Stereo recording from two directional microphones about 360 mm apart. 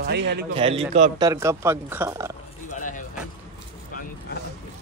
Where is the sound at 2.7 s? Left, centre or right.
Left.